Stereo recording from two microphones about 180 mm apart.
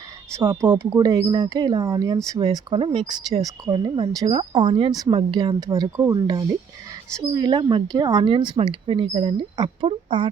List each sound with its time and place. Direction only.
0.3 s speech: 15° right (ahead or behind)